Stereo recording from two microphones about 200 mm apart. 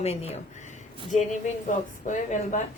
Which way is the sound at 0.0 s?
30° left (ahead or behind).